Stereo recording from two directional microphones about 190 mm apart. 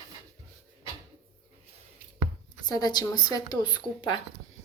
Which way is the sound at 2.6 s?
20° left (ahead or behind).